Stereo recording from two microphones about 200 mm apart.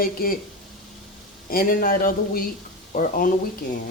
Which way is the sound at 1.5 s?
45° left (ahead or behind).